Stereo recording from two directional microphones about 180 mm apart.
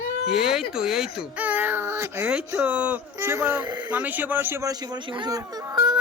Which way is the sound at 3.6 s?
25° right (ahead or behind).